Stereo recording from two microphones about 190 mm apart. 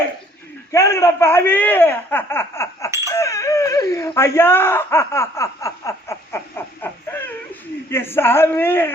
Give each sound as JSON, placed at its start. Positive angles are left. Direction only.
{"t": 0.7, "sound": "speech", "side_deg": 15}
{"t": 3.1, "sound": "a sound", "side_deg": 15}
{"t": 7.9, "sound": "speech", "side_deg": 10}